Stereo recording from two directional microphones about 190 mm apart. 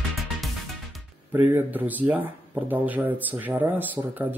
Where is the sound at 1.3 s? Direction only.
10° right (ahead or behind).